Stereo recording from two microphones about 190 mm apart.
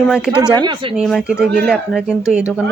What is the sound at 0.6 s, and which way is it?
Speech, 25° right (ahead or behind).